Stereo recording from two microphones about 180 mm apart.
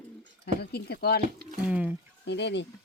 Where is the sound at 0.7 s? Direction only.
60° left (ahead or behind).